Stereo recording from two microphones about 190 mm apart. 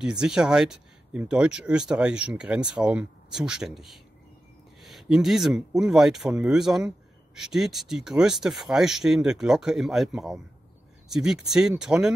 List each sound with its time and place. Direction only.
0.0 s speech: 5° right (ahead or behind)